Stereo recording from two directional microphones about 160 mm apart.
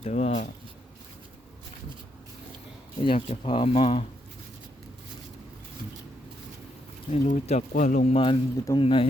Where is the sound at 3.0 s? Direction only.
35° left (ahead or behind).